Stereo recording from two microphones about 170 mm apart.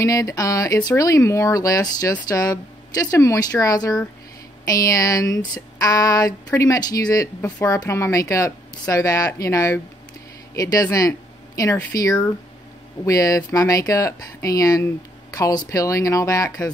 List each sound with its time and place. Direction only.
0.0 s speech: 20° left (ahead or behind)